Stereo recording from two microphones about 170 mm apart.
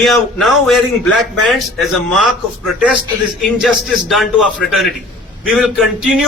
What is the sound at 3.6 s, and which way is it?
A man's voice, centre (ahead or behind).